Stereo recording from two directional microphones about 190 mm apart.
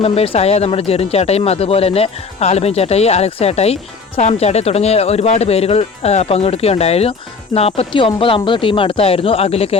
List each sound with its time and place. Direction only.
0.0 s speech: 30° left (ahead or behind)